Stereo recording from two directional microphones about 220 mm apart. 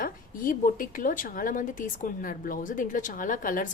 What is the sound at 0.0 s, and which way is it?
A woman's voice, 40° left (ahead or behind).